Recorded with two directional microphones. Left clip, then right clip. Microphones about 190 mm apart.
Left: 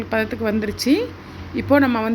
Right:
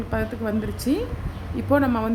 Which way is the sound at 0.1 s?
20° left (ahead or behind).